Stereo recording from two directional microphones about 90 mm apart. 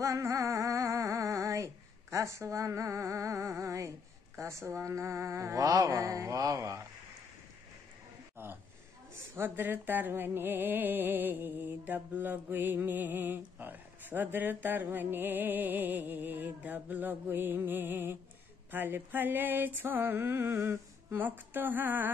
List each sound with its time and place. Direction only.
0.0 s music: 35° right (ahead or behind)
4.4 s mantra: 30° right (ahead or behind)
8.4 s speech: 25° right (ahead or behind)
9.1 s music: 25° right (ahead or behind)